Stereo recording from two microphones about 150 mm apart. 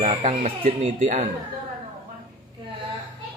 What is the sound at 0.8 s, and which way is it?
Speech, 55° right (ahead or behind).